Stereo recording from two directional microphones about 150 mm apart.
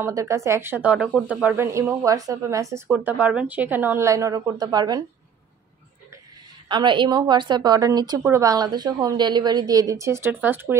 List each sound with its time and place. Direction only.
0.0 s a woman's voice: 20° right (ahead or behind)
6.7 s a woman's voice: 30° right (ahead or behind); by 10.8 s 15° right (ahead or behind)